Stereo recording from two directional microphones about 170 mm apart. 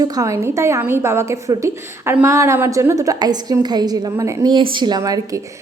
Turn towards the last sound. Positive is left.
turn(degrees=-20)  # may be behind; listen again after turning